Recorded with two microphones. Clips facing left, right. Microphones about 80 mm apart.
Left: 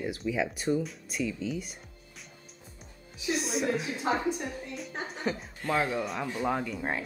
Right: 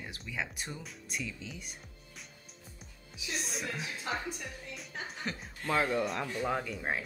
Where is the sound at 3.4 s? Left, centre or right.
Centre.